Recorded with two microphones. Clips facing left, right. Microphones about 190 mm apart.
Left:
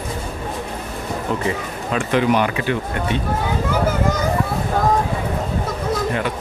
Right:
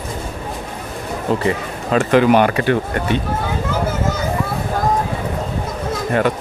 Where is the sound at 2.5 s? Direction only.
50° right (ahead or behind).